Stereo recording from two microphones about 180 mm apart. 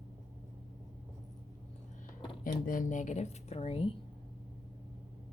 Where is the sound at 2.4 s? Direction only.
50° left (ahead or behind).